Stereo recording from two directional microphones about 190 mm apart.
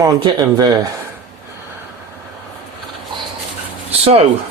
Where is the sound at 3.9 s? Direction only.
30° right (ahead or behind).